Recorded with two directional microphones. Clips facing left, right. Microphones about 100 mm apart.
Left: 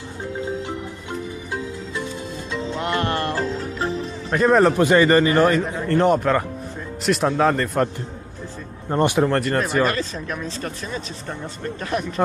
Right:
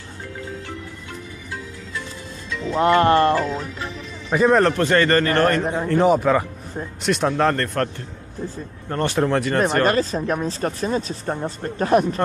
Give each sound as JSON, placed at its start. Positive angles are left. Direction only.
{"t": 0.4, "sound": "marimba", "side_deg": 20}
{"t": 2.7, "sound": "music", "side_deg": -35}
{"t": 3.6, "sound": "music", "side_deg": 35}
{"t": 4.3, "sound": "a man's voice", "side_deg": 0}
{"t": 9.2, "sound": "speech", "side_deg": 0}
{"t": 9.8, "sound": "a man's voice", "side_deg": -40}